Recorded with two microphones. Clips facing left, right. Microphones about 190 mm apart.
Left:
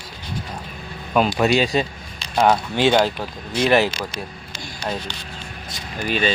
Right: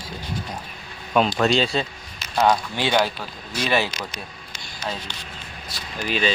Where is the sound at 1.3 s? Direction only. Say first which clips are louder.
Left 2 dB; 15° left (ahead or behind).